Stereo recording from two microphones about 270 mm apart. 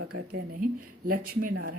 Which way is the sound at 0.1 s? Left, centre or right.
Right.